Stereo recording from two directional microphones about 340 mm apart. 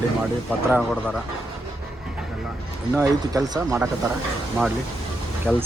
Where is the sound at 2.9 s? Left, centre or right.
Centre.